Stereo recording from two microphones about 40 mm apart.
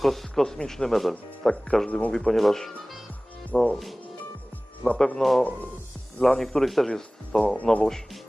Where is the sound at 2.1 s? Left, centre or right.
Centre.